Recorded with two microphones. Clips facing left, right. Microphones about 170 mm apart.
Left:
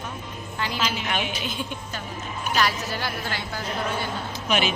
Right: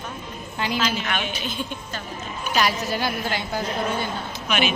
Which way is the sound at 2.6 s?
15° right (ahead or behind).